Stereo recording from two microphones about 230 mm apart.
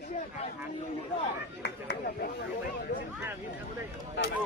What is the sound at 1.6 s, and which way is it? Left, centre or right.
Chatter, left.